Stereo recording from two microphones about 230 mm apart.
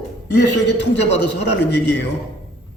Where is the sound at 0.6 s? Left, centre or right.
Left.